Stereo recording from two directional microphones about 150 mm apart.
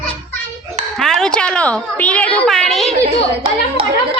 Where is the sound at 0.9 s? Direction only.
5° left (ahead or behind).